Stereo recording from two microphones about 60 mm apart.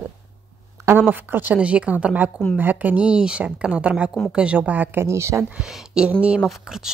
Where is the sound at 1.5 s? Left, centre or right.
Right.